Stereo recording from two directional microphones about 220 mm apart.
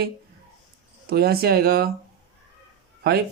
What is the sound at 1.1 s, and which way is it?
Speech, 45° right (ahead or behind).